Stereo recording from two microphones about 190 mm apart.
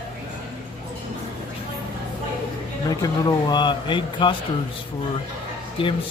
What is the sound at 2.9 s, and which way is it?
Speech, 20° left (ahead or behind).